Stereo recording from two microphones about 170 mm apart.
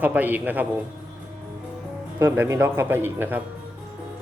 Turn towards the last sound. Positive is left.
turn(degrees=-10)  # may be behind; listen again after turning